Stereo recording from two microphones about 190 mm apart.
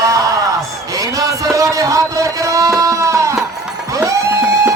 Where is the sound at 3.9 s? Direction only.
15° right (ahead or behind).